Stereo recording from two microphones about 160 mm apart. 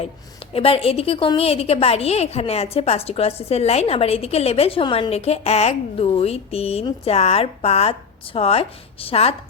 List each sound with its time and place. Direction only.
0.5 s a woman's voice: 35° left (ahead or behind)